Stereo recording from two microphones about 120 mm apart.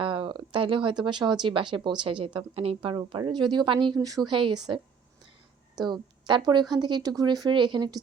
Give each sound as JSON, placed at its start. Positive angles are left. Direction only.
{"t": 0.0, "sound": "a woman's voice", "side_deg": -45}
{"t": 3.1, "sound": "speech", "side_deg": -40}
{"t": 5.8, "sound": "speech", "side_deg": -40}